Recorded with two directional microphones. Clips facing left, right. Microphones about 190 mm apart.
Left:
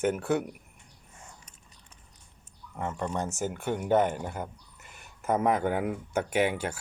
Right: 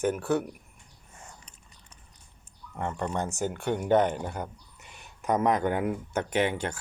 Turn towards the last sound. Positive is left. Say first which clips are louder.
# even
turn(degrees=5)  # may be behind; listen again after turning